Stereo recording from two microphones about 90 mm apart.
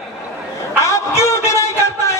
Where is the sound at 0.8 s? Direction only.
35° left (ahead or behind).